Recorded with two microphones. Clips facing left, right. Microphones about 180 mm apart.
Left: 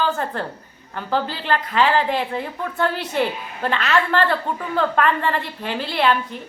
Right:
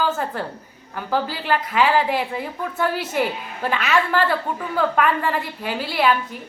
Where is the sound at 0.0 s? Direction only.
10° right (ahead or behind).